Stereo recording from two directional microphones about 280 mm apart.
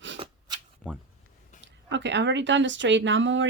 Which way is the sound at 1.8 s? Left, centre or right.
Right.